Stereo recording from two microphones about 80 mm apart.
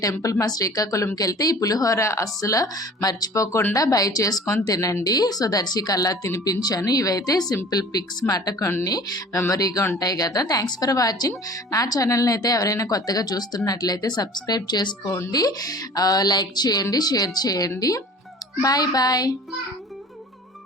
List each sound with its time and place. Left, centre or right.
0.0 s a woman's voice: left
8.8 s a woman's voice: left